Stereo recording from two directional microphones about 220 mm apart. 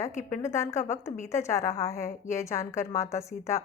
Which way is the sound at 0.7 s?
35° left (ahead or behind).